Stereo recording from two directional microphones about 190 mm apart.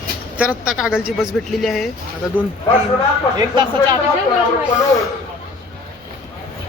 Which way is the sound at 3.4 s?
20° right (ahead or behind).